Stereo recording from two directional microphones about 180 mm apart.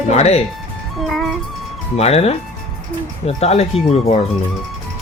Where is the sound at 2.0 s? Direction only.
35° left (ahead or behind).